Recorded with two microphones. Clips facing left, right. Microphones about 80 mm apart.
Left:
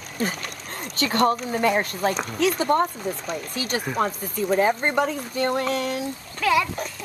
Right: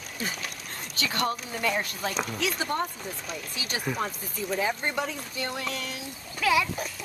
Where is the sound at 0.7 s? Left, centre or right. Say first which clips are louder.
Left 7 dB; left.